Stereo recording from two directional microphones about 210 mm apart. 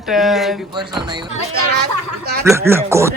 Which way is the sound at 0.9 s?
20° right (ahead or behind).